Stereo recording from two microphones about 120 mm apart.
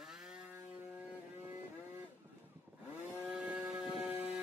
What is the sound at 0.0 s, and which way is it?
Music, 5° right (ahead or behind).